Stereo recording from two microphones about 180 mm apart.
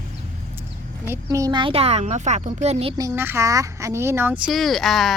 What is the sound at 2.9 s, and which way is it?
Speech, 20° right (ahead or behind).